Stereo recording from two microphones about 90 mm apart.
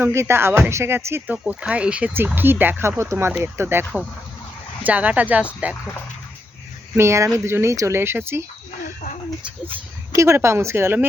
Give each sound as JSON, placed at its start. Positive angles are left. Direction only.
{"t": 0.0, "sound": "speech", "side_deg": -30}
{"t": 1.3, "sound": "speech", "side_deg": -15}
{"t": 6.9, "sound": "speech", "side_deg": -30}
{"t": 10.1, "sound": "speech", "side_deg": -30}